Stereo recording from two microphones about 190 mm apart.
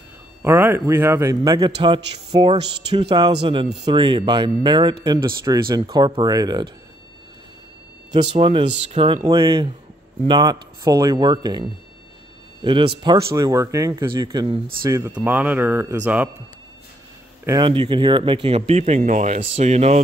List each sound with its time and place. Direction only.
0.4 s speech: 10° right (ahead or behind)
8.1 s speech: 25° right (ahead or behind); by 16.3 s 10° right (ahead or behind)
17.5 s speech: 25° right (ahead or behind)